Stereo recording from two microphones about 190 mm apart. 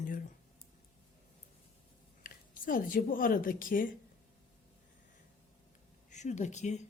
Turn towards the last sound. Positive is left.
turn(degrees=35)  # may be behind; listen again after turning